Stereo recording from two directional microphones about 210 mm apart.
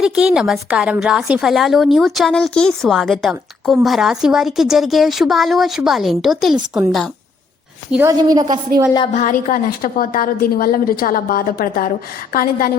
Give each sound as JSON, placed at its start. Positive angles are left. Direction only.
{"t": 0.0, "sound": "a woman's voice", "side_deg": -5}
{"t": 8.2, "sound": "a woman's voice", "side_deg": -20}
{"t": 9.1, "sound": "a woman's voice", "side_deg": 40}